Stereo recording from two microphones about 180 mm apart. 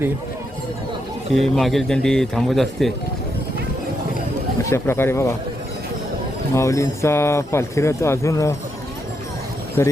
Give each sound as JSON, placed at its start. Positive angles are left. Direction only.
{"t": 1.3, "sound": "speech", "side_deg": 0}
{"t": 4.7, "sound": "speech", "side_deg": 15}
{"t": 6.5, "sound": "speech", "side_deg": 15}
{"t": 9.8, "sound": "speech", "side_deg": 15}